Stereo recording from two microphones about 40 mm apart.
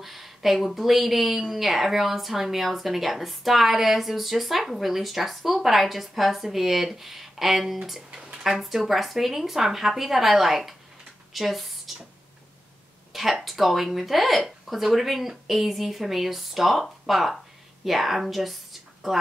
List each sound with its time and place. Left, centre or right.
0.0 s speech: centre
8.1 s a sound: centre
8.5 s speech: centre
13.1 s speech: centre